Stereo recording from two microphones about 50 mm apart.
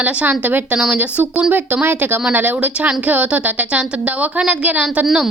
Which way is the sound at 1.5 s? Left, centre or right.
Right.